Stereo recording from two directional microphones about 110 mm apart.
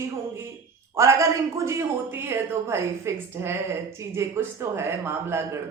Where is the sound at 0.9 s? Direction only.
25° right (ahead or behind).